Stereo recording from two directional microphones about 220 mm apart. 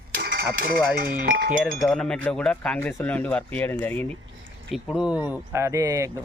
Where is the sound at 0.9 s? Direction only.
40° right (ahead or behind).